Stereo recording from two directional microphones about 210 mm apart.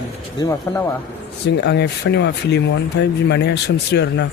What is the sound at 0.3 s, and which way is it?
Speech, 15° left (ahead or behind).